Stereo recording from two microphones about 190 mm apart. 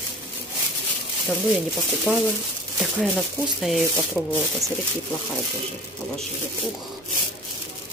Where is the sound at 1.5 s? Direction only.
Centre (ahead or behind).